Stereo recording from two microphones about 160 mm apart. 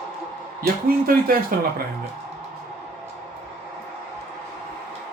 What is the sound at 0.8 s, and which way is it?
Speech, 65° right (ahead or behind).